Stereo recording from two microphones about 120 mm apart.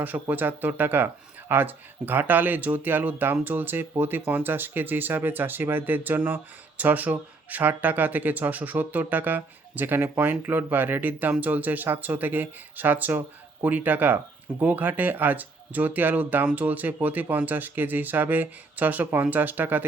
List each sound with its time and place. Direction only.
0.0 s speech: 15° right (ahead or behind)